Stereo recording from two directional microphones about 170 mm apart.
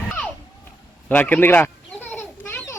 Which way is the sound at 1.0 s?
10° left (ahead or behind).